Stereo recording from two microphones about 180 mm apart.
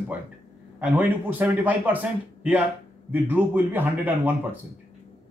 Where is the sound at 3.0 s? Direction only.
10° right (ahead or behind).